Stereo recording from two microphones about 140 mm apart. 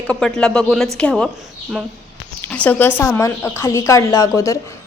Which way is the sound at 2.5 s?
10° left (ahead or behind).